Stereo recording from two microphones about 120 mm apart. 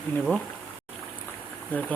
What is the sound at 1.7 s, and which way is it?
Speech, 15° left (ahead or behind).